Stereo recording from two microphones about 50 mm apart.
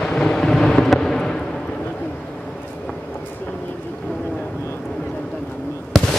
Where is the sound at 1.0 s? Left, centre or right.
Centre.